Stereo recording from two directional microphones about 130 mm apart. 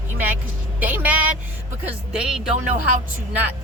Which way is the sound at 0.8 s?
15° right (ahead or behind).